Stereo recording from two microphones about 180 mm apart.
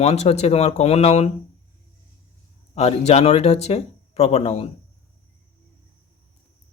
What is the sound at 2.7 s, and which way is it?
Speech, 35° left (ahead or behind).